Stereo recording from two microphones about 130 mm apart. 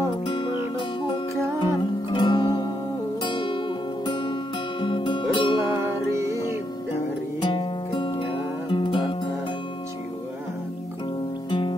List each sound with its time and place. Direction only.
0.1 s music: 40° left (ahead or behind)
5.7 s music: 20° right (ahead or behind)
7.4 s music: 40° left (ahead or behind)